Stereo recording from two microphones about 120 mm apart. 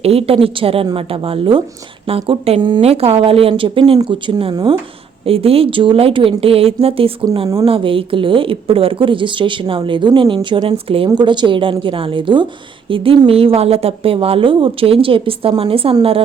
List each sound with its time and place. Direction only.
0.0 s speech: 55° right (ahead or behind)
2.8 s a woman's voice: 55° right (ahead or behind)